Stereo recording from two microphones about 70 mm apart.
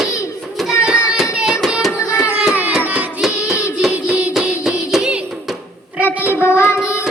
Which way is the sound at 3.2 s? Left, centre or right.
Centre.